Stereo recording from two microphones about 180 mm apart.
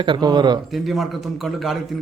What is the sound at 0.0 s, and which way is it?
Speech, 25° right (ahead or behind).